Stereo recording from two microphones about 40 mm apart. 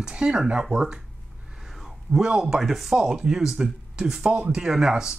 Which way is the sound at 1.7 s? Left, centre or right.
Centre.